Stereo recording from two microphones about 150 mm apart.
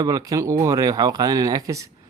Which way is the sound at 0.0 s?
25° right (ahead or behind).